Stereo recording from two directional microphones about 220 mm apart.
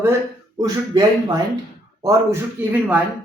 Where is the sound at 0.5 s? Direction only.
15° right (ahead or behind).